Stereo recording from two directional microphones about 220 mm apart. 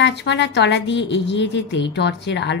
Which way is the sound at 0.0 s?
50° left (ahead or behind).